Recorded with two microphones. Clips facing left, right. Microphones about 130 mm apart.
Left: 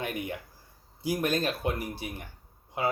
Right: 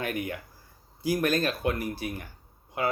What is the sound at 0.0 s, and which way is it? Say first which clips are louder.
Speech: right 2 dB; 25° left (ahead or behind).